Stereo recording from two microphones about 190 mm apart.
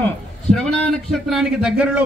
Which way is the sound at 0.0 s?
5° left (ahead or behind).